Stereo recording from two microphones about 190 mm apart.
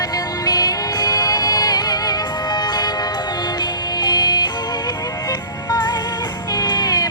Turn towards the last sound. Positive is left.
turn(degrees=20)  # may be behind; listen again after turning